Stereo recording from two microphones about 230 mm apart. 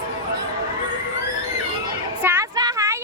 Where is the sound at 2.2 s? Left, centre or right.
Centre.